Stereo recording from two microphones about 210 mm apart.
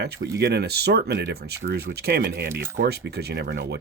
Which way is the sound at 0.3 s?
50° right (ahead or behind).